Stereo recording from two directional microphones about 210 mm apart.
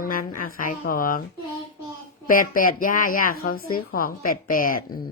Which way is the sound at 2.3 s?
40° left (ahead or behind).